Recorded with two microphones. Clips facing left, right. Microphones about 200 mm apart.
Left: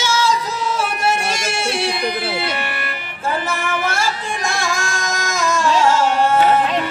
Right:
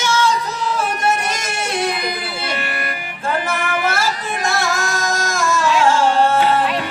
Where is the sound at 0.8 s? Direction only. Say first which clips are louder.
Right 1 dB; 10° left (ahead or behind).